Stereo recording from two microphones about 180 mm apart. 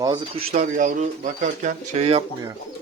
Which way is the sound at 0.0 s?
20° right (ahead or behind).